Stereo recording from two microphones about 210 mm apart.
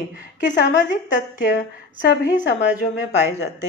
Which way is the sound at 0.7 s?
55° left (ahead or behind).